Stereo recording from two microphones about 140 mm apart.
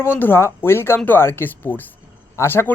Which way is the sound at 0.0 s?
15° left (ahead or behind).